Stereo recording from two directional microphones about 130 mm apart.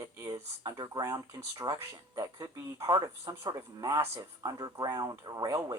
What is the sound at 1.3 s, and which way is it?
Speech, 20° right (ahead or behind).